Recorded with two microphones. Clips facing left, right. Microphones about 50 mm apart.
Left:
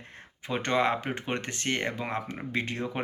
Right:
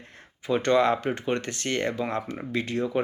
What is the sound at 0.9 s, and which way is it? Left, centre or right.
Speech, centre.